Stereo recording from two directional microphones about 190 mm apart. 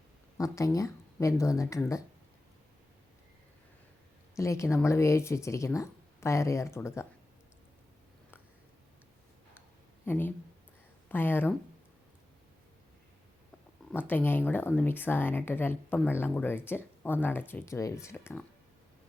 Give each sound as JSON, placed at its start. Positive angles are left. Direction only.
{"t": 0.3, "sound": "speech", "side_deg": 15}
{"t": 4.4, "sound": "speech", "side_deg": 15}
{"t": 10.1, "sound": "speech", "side_deg": 10}
{"t": 14.1, "sound": "speech", "side_deg": 10}